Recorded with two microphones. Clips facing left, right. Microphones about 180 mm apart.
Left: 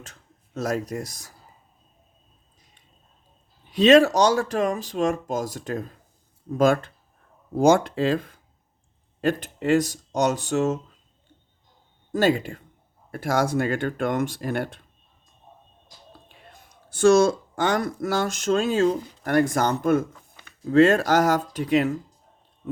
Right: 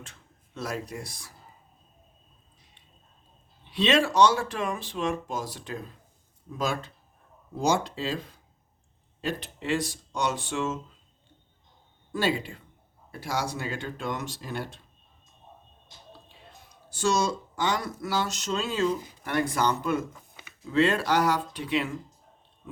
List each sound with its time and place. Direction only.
0.0 s speech: 40° left (ahead or behind)
3.7 s speech: 45° left (ahead or behind)
12.1 s speech: 45° left (ahead or behind)
16.5 s speech: 55° left (ahead or behind)